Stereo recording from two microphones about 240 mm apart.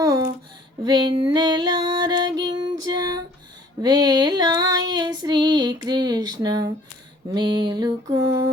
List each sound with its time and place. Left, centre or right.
0.0 s a sound: centre
0.9 s female singing: centre
2.5 s music: centre
3.8 s female singing: centre
7.3 s music: centre